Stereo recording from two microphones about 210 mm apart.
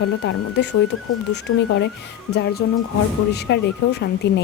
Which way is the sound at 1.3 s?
55° left (ahead or behind).